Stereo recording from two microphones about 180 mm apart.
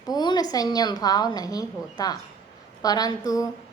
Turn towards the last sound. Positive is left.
turn(degrees=20)  # may be behind; listen again after turning